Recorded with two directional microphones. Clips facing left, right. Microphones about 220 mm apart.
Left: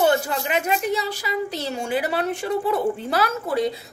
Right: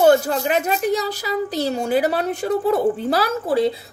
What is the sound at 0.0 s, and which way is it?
Speech, 40° right (ahead or behind).